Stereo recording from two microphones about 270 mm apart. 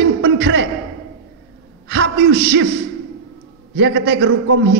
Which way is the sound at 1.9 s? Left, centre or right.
Right.